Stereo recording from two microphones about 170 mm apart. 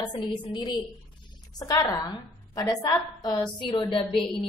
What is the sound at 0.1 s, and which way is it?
A woman's voice, 25° left (ahead or behind).